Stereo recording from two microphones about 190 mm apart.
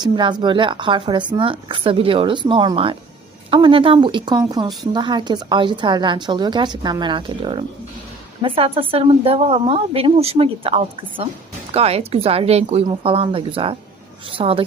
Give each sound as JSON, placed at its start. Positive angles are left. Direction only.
{"t": 0.0, "sound": "a woman's voice", "side_deg": -25}